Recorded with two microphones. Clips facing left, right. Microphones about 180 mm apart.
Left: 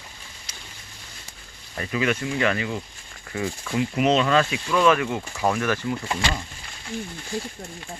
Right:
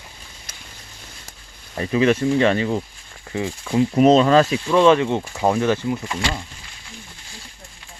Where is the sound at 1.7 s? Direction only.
30° right (ahead or behind).